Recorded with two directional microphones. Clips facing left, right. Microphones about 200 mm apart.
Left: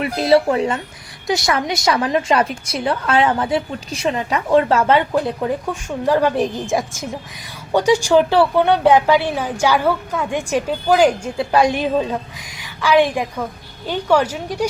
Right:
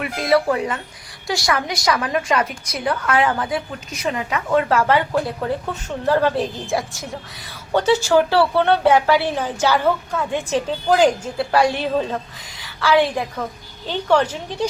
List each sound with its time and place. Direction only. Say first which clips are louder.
0.0 s a woman's voice: left 4 dB; 25° left (ahead or behind); by 14.7 s 10° left (ahead or behind)